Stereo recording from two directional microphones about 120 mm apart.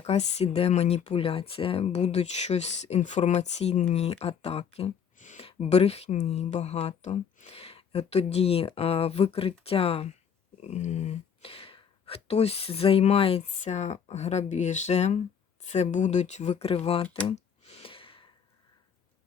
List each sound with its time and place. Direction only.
0.0 s speech: 65° left (ahead or behind); by 5.4 s 90° left
5.4 s speech: 60° left (ahead or behind)
10.6 s speech: 70° left (ahead or behind); by 13.4 s 50° left (ahead or behind)
13.4 s speech: 70° left (ahead or behind); by 17.1 s 55° left (ahead or behind)
17.3 s sigh: 55° left (ahead or behind)